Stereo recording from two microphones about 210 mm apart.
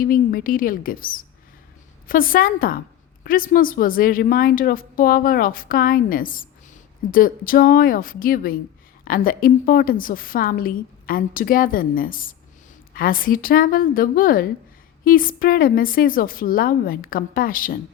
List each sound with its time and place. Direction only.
0.0 s a woman's voice: 45° left (ahead or behind)